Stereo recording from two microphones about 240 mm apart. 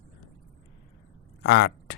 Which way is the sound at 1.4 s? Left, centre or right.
Left.